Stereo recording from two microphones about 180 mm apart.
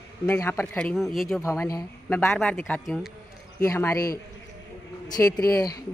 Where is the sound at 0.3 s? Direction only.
15° left (ahead or behind).